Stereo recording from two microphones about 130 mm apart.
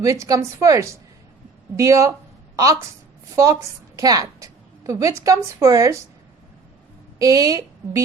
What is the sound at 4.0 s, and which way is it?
A woman's voice, 30° right (ahead or behind).